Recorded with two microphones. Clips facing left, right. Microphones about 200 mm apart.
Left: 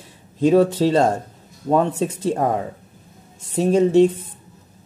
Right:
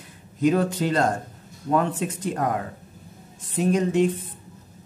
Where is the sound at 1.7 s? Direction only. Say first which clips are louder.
Left 4 dB; 25° left (ahead or behind).